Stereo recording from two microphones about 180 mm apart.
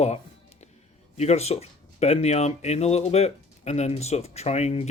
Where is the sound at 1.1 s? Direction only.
35° left (ahead or behind).